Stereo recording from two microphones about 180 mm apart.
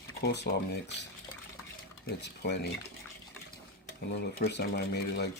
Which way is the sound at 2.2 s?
70° left (ahead or behind).